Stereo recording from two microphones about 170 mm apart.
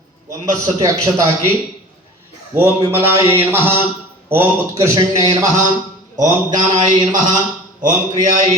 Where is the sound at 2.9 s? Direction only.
15° right (ahead or behind).